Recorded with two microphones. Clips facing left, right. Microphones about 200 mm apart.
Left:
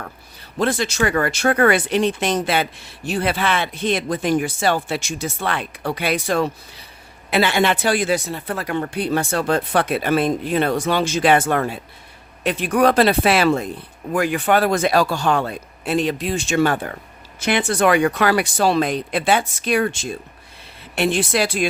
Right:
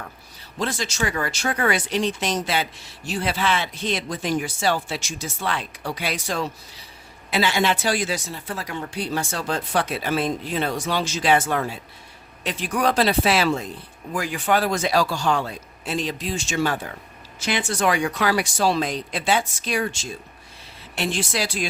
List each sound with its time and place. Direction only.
0.6 s speech: 60° left (ahead or behind)